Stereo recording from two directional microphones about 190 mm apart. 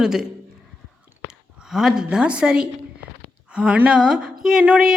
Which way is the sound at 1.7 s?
Centre (ahead or behind).